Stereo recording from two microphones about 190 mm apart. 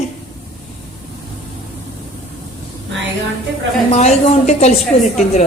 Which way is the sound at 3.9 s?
35° left (ahead or behind).